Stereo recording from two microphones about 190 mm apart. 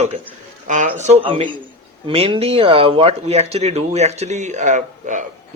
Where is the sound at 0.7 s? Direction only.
40° right (ahead or behind).